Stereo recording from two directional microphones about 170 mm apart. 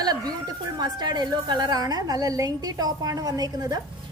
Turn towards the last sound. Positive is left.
turn(degrees=-25)  # may be behind; listen again after turning